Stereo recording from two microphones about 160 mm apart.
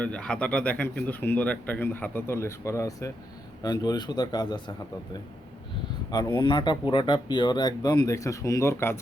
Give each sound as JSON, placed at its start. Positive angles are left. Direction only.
{"t": 0.0, "sound": "speech", "side_deg": 5}
{"t": 6.1, "sound": "speech", "side_deg": 25}